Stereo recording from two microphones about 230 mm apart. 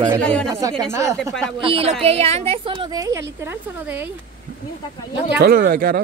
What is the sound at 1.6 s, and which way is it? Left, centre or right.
A woman's voice, right.